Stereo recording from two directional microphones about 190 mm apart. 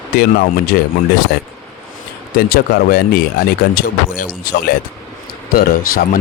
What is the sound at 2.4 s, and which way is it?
Speech, 55° left (ahead or behind).